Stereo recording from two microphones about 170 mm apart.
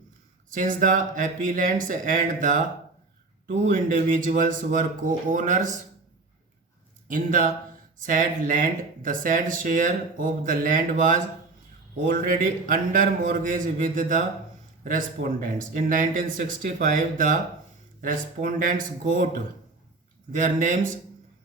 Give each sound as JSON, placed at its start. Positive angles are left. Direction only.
{"t": 0.5, "sound": "speech", "side_deg": -50}
{"t": 7.1, "sound": "speech", "side_deg": -50}
{"t": 20.3, "sound": "speech", "side_deg": -50}